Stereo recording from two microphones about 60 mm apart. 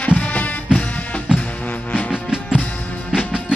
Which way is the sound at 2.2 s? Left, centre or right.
Centre.